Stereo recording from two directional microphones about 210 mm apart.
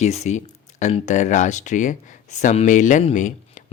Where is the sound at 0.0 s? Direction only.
30° left (ahead or behind).